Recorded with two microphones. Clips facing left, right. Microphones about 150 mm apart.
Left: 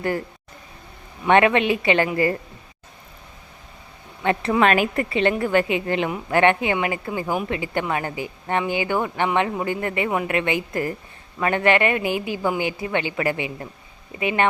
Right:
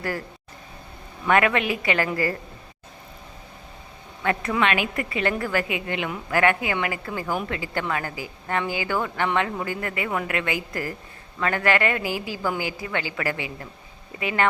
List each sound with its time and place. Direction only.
1.2 s a woman's voice: 25° left (ahead or behind)
4.2 s a woman's voice: 25° left (ahead or behind)
4.6 s a woman's voice: 40° left (ahead or behind)
5.0 s a woman's voice: 25° left (ahead or behind)